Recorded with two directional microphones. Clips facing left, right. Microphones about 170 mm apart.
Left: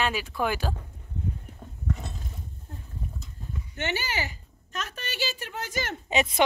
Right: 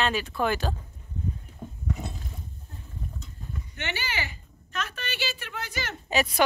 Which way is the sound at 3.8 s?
45° left (ahead or behind).